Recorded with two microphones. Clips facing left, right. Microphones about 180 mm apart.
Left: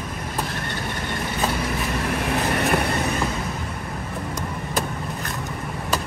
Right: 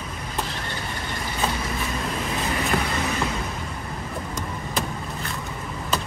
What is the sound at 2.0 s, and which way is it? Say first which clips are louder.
Vehicle: left 4 dB; 70° left (ahead or behind).